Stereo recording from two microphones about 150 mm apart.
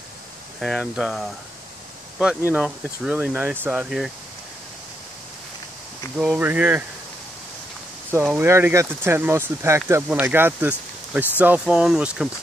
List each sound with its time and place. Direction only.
0.6 s speech: centre (ahead or behind)
6.1 s speech: 10° right (ahead or behind)
8.1 s speech: 15° right (ahead or behind)